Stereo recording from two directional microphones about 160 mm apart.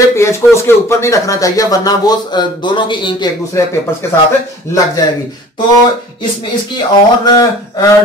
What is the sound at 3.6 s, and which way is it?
Speech, 20° left (ahead or behind).